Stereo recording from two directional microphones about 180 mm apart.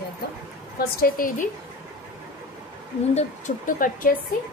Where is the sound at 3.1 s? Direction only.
45° left (ahead or behind).